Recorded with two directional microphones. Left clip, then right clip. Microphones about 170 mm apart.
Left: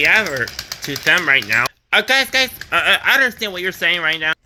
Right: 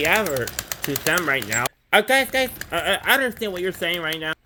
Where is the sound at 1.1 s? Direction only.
5° right (ahead or behind).